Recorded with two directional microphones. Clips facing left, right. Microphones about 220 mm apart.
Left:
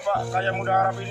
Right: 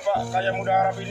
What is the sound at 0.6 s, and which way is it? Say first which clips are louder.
Speech: right 1 dB; 10° right (ahead or behind).